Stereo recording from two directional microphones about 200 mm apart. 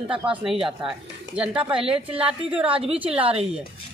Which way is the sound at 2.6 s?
30° right (ahead or behind).